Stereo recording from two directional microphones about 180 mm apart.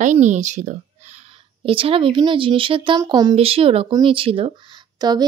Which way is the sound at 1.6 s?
30° right (ahead or behind).